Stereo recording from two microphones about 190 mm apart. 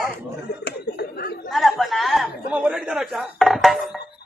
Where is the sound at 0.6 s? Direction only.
55° left (ahead or behind).